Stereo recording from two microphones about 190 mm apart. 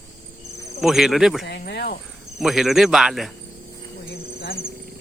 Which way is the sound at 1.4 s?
60° left (ahead or behind).